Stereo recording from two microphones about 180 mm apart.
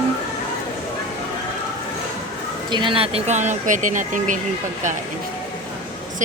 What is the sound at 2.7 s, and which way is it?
Speech, 25° right (ahead or behind).